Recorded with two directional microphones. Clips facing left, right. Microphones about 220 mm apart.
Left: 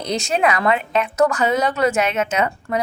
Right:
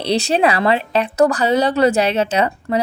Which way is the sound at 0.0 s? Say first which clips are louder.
Right 4 dB; 30° right (ahead or behind).